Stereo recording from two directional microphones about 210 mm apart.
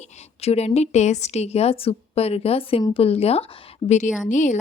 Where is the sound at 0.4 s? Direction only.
30° left (ahead or behind).